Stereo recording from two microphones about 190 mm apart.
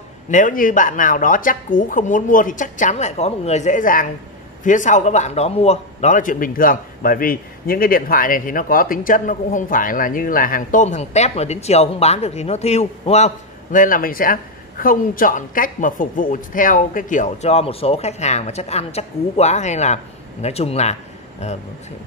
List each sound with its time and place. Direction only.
0.3 s a man's voice: 45° left (ahead or behind)